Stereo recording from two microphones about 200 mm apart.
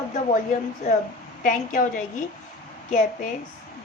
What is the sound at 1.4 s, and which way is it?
A woman's voice, 40° left (ahead or behind).